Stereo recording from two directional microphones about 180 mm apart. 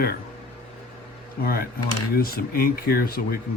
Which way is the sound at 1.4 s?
55° left (ahead or behind).